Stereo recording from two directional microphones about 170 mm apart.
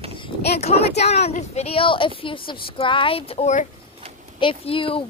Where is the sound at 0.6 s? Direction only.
40° left (ahead or behind).